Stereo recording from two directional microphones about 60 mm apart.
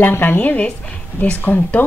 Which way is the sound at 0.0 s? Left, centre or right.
Left.